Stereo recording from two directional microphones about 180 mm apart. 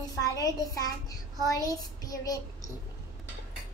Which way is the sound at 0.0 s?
20° left (ahead or behind).